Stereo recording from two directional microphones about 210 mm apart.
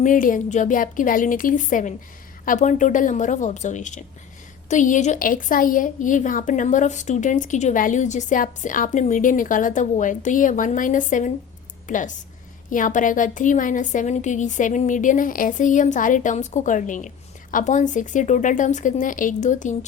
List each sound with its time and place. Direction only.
0.0 s a woman's voice: 40° left (ahead or behind)